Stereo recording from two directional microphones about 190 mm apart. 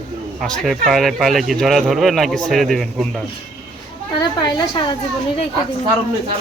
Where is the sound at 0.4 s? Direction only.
Centre (ahead or behind).